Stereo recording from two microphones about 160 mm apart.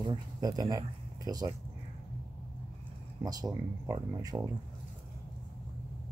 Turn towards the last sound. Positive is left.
turn(degrees=-25)  # may be behind; listen again after turning